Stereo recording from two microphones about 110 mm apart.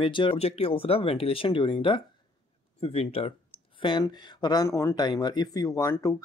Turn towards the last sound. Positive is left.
turn(degrees=30)  # may be behind; listen again after turning